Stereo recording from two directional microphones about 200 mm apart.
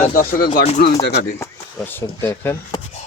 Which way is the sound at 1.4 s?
10° left (ahead or behind).